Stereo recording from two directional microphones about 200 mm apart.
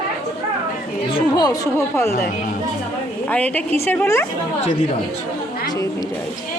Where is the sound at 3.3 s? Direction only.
5° left (ahead or behind).